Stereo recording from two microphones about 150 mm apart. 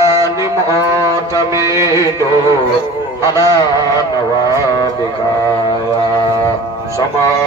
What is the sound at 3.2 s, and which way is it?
Speech, 20° left (ahead or behind).